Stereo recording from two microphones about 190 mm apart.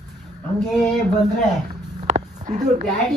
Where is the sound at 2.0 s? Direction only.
35° right (ahead or behind).